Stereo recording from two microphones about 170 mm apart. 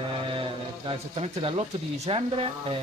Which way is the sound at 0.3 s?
30° right (ahead or behind).